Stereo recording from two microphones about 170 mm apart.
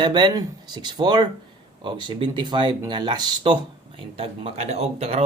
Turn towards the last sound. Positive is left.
turn(degrees=-40)  # may be behind; listen again after turning